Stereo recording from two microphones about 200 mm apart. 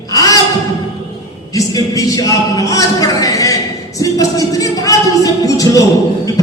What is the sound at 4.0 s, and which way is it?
Music, 15° left (ahead or behind).